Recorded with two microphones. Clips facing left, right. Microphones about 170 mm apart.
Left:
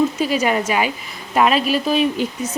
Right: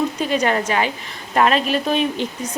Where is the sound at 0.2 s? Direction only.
5° left (ahead or behind).